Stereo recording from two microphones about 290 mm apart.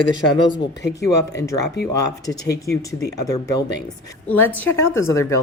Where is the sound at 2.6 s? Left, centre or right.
Centre.